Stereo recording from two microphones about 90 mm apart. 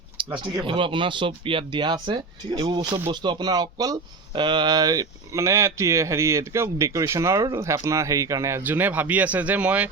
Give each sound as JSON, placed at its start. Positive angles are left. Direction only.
{"t": 0.2, "sound": "a sound", "side_deg": -75}
{"t": 0.6, "sound": "speech", "side_deg": -70}
{"t": 8.6, "sound": "speech", "side_deg": -20}